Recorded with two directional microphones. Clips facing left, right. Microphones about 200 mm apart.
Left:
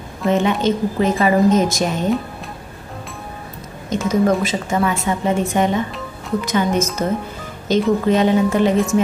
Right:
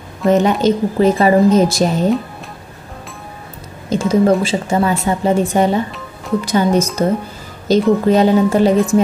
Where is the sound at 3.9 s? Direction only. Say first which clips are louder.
Right 4 dB; 30° right (ahead or behind).